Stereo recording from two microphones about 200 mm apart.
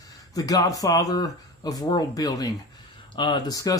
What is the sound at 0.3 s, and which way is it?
Speech, 15° left (ahead or behind).